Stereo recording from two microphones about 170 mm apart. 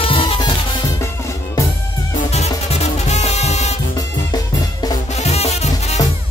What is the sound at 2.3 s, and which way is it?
Music, 40° left (ahead or behind).